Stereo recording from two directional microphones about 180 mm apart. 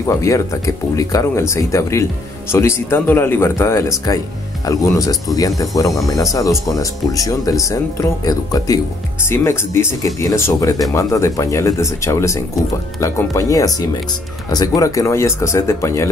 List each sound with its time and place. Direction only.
0.0 s speech: 15° left (ahead or behind)